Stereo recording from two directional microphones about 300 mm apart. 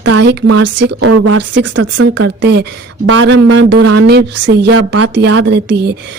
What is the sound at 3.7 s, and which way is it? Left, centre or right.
Speech, right.